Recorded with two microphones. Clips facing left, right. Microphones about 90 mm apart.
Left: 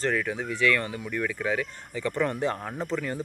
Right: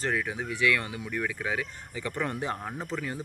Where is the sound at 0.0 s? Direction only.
15° right (ahead or behind).